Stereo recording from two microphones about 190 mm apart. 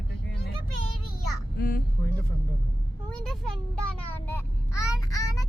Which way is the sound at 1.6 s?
55° left (ahead or behind).